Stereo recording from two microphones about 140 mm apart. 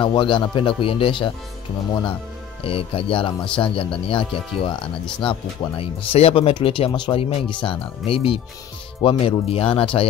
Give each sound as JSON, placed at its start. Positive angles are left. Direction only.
{"t": 0.0, "sound": "speech", "side_deg": 35}
{"t": 2.6, "sound": "speech", "side_deg": 40}